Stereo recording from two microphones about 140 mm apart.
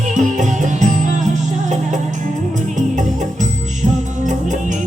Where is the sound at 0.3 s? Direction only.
65° right (ahead or behind).